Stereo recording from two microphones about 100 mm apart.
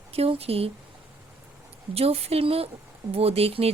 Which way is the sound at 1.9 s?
85° right.